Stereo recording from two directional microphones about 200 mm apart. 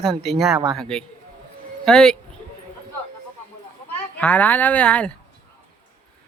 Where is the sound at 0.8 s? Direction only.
5° left (ahead or behind).